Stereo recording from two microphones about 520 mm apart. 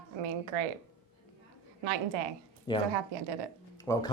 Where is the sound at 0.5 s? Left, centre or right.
Right.